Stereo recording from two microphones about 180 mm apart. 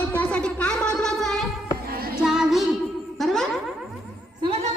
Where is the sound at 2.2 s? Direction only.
5° right (ahead or behind).